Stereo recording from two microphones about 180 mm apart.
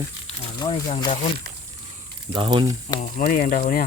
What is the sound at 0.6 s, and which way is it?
Speech, 25° left (ahead or behind).